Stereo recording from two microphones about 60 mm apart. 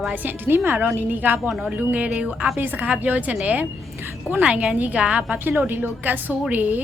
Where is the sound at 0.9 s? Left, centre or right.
Right.